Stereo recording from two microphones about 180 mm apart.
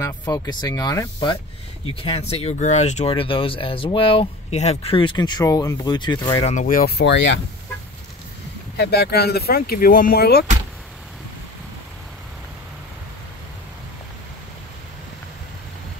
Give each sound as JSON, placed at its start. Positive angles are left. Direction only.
{"t": 0.0, "sound": "speech", "side_deg": 20}
{"t": 2.0, "sound": "speech", "side_deg": 30}
{"t": 6.5, "sound": "speech", "side_deg": 50}
{"t": 8.7, "sound": "speech", "side_deg": 65}